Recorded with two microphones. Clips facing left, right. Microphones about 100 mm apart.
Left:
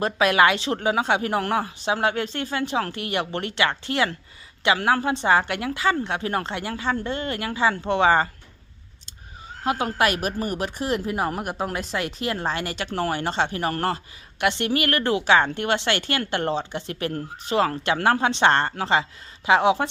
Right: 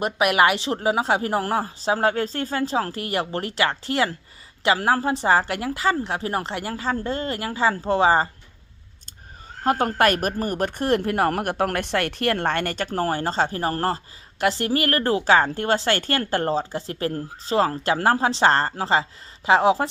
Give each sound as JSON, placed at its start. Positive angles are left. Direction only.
{"t": 0.0, "sound": "a woman's voice", "side_deg": -20}
{"t": 9.6, "sound": "a woman's voice", "side_deg": -45}